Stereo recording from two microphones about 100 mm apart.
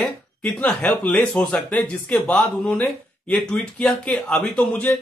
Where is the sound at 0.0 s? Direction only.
15° left (ahead or behind).